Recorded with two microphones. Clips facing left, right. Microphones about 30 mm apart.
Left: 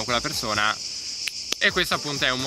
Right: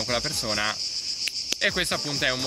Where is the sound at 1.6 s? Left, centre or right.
Centre.